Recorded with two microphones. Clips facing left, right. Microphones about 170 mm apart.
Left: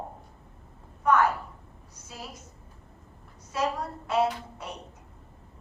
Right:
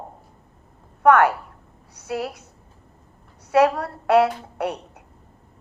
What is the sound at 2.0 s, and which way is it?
Speech, 70° right (ahead or behind).